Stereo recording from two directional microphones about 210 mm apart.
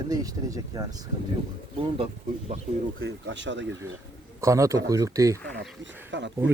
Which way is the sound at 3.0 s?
55° right (ahead or behind).